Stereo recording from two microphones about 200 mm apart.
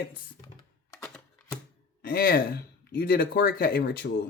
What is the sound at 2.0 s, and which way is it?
Speech, 50° left (ahead or behind).